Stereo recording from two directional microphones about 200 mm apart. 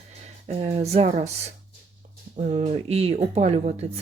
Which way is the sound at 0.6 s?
30° right (ahead or behind).